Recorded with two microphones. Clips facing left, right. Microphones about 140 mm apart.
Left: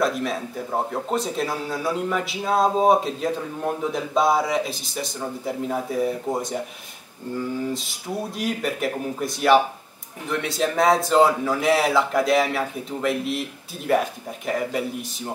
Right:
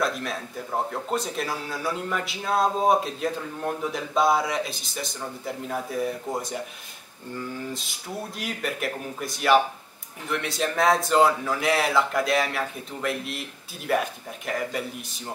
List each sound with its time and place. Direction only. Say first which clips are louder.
0.0 s a man's voice: left 4 dB; 5° left (ahead or behind)
7.3 s a man's voice: left 6 dB; 5° left (ahead or behind)